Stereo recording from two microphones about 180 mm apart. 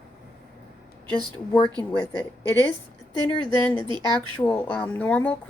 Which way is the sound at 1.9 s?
10° left (ahead or behind).